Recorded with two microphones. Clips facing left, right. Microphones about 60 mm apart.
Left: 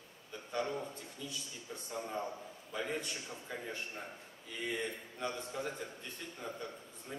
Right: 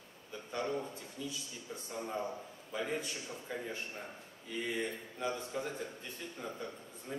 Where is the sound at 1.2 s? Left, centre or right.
Centre.